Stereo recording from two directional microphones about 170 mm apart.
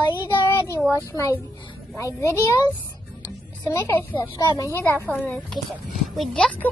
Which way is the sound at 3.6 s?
15° left (ahead or behind).